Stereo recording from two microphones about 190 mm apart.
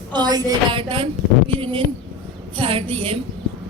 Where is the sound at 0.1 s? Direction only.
20° right (ahead or behind).